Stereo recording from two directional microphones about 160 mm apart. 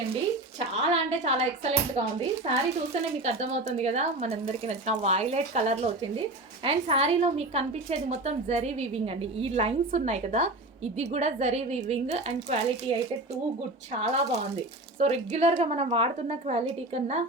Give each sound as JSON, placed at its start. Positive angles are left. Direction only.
{"t": 0.6, "sound": "a woman's voice", "side_deg": -40}
{"t": 14.0, "sound": "a woman's voice", "side_deg": -45}